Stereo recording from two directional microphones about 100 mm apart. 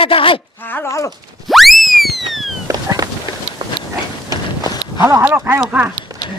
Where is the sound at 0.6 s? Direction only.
20° left (ahead or behind).